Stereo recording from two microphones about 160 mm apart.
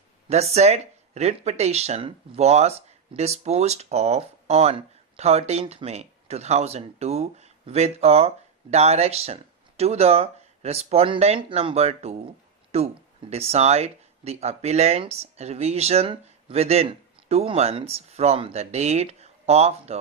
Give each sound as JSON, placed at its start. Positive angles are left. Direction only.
{"t": 0.3, "sound": "speech", "side_deg": -40}